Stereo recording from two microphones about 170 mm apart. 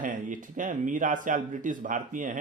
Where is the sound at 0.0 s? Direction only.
50° right (ahead or behind).